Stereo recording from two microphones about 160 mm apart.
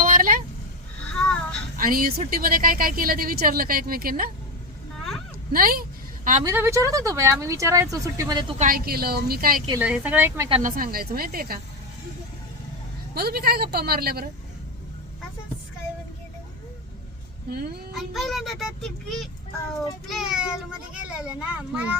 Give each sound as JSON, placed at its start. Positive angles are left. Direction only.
{"t": 0.0, "sound": "a sound", "side_deg": -60}
{"t": 1.1, "sound": "a sound", "side_deg": 5}
{"t": 1.8, "sound": "speech", "side_deg": -65}
{"t": 5.5, "sound": "speech", "side_deg": -65}
{"t": 6.4, "sound": "speech", "side_deg": -15}
{"t": 8.5, "sound": "a woman's voice", "side_deg": -60}
{"t": 9.8, "sound": "a child's voice", "side_deg": -10}
{"t": 10.6, "sound": "a woman's voice", "side_deg": -60}
{"t": 13.1, "sound": "a woman's voice", "side_deg": -75}
{"t": 17.5, "sound": "a woman's voice", "side_deg": -75}
{"t": 17.9, "sound": "a child's voice", "side_deg": 0}